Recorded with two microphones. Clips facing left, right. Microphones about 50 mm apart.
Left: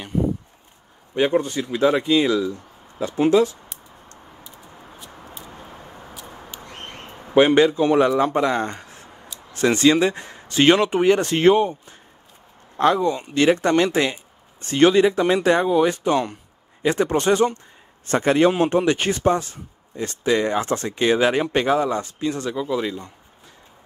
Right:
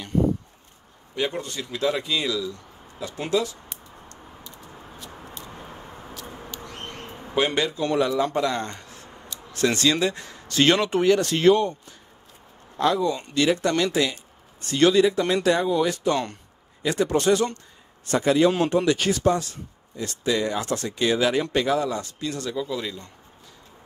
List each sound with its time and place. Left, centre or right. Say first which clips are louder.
1.1 s speech: left 8 dB; left
7.3 s speech: left 9 dB; left
11.6 s speech: left 3 dB; centre
12.7 s speech: left 4 dB; left
16.1 s speech: left 3 dB; centre
16.8 s speech: left 2 dB; left
18.0 s speech: left 2 dB; left; by 23.1 s centre